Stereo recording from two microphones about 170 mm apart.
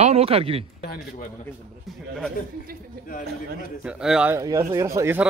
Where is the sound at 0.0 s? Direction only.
35° right (ahead or behind).